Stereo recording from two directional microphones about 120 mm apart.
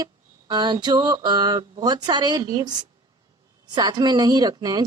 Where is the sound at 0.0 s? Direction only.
35° right (ahead or behind).